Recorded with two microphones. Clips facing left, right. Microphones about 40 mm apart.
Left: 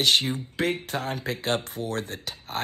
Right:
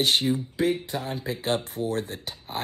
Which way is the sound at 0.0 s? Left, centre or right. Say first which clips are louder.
Even; left.